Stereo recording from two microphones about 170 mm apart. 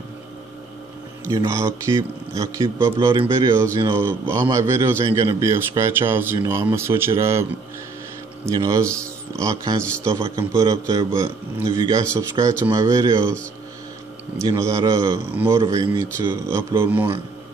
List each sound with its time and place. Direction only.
1.3 s a man's voice: 20° right (ahead or behind)
8.5 s a man's voice: 20° right (ahead or behind)
14.4 s a man's voice: 20° right (ahead or behind)
15.6 s a man's voice: 25° right (ahead or behind); by 17.1 s 10° right (ahead or behind)